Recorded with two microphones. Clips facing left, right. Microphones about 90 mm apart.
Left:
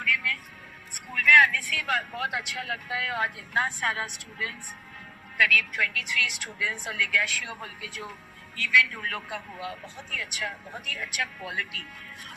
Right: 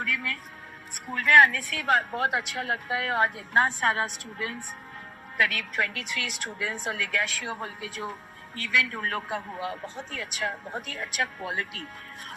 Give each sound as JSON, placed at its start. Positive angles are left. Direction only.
{"t": 0.0, "sound": "speech", "side_deg": -35}